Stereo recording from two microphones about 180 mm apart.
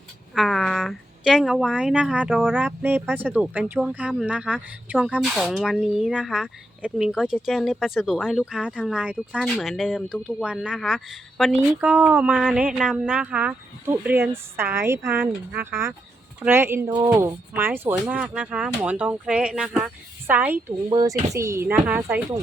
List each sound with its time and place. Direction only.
0.3 s speech: centre (ahead or behind)